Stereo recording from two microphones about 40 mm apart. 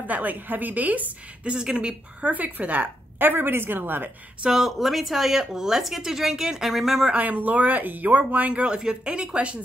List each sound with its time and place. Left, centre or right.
0.0 s a woman's voice: right
1.4 s speech: right
2.3 s speech: right
3.2 s a woman's voice: right
4.5 s speech: centre
7.2 s speech: right
8.6 s speech: right